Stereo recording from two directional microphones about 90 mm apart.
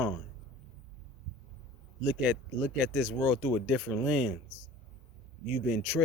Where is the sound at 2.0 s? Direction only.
10° right (ahead or behind).